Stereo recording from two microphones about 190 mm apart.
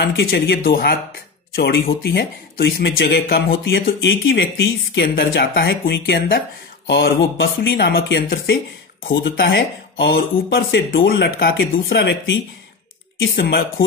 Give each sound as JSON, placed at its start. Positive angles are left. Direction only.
{"t": 0.0, "sound": "speech", "side_deg": 70}
{"t": 9.1, "sound": "speech", "side_deg": 75}
{"t": 13.2, "sound": "speech", "side_deg": 60}